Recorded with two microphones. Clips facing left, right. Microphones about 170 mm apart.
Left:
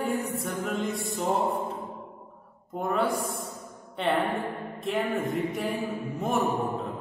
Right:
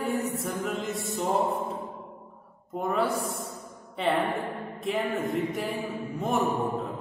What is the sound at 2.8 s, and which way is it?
Mantra, centre (ahead or behind).